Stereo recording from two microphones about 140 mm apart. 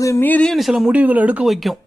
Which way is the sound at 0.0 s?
15° left (ahead or behind).